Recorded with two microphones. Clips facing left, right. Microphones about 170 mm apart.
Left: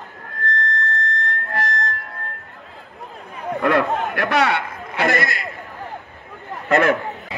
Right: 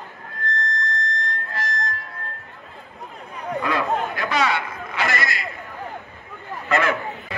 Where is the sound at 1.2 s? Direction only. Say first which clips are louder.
Left 4 dB; 60° left (ahead or behind).